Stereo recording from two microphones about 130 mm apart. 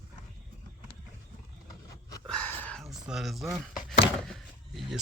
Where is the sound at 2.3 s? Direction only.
10° left (ahead or behind).